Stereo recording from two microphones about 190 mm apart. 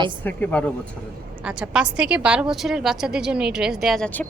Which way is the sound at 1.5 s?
5° right (ahead or behind).